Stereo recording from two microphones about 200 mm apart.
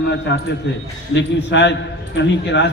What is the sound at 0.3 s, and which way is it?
A man's voice, 60° left (ahead or behind).